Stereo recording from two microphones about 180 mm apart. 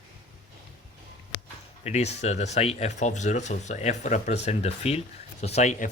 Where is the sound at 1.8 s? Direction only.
35° left (ahead or behind).